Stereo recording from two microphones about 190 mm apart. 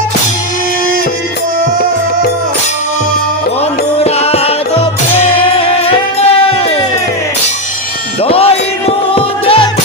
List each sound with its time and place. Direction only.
4.0 s music: 35° left (ahead or behind)
8.2 s music: 30° left (ahead or behind)